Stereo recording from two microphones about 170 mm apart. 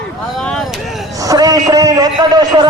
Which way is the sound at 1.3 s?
20° right (ahead or behind).